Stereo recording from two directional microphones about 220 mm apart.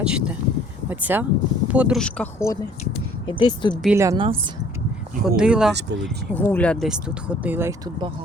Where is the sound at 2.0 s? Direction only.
5° left (ahead or behind).